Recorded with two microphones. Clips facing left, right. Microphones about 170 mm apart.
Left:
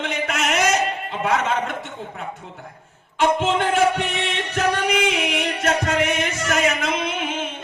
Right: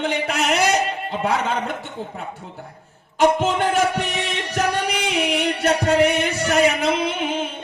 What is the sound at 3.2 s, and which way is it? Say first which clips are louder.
Singing: right 2 dB; 40° right (ahead or behind).